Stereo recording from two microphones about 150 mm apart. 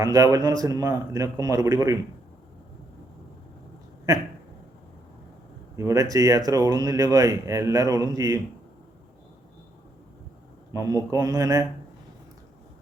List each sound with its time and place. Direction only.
0.0 s speech: 20° right (ahead or behind)
5.7 s speech: 20° right (ahead or behind)
10.7 s speech: 20° right (ahead or behind)